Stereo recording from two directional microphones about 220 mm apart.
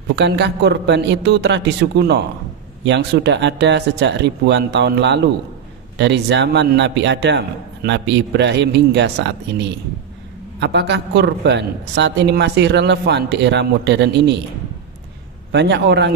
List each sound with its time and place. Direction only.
0.1 s speech: 50° right (ahead or behind)
15.5 s speech: 50° right (ahead or behind)